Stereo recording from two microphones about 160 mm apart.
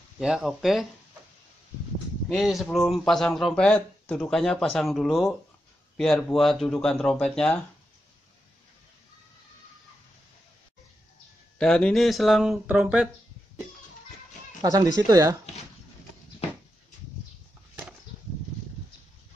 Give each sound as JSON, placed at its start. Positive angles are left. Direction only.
{"t": 0.2, "sound": "speech", "side_deg": -5}
{"t": 2.2, "sound": "speech", "side_deg": 0}
{"t": 11.5, "sound": "speech", "side_deg": 5}
{"t": 14.6, "sound": "speech", "side_deg": -25}